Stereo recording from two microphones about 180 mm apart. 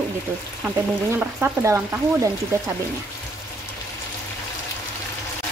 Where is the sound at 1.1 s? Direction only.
10° right (ahead or behind).